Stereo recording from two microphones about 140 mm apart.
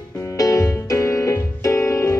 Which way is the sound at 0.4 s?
25° left (ahead or behind).